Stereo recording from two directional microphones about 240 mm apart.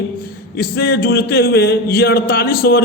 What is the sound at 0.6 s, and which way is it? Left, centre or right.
A man's voice, left.